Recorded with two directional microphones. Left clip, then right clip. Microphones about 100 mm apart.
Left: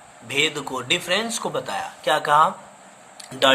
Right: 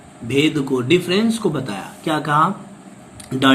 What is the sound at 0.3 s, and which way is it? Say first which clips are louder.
Speech: right 4 dB; 45° left (ahead or behind).